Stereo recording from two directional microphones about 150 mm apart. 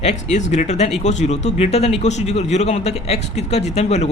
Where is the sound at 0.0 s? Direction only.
50° left (ahead or behind).